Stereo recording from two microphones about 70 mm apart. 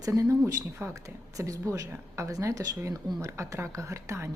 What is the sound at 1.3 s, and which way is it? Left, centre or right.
A woman's voice, right.